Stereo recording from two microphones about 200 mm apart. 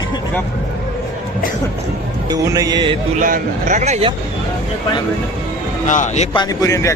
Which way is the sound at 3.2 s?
40° right (ahead or behind).